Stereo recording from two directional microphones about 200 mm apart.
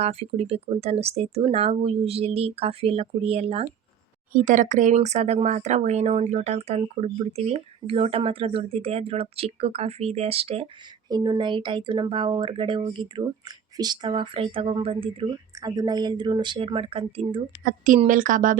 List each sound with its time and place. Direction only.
0.0 s speech: 30° right (ahead or behind)
17.6 s speech: 40° right (ahead or behind)